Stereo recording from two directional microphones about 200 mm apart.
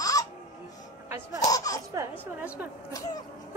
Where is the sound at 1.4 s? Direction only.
15° left (ahead or behind).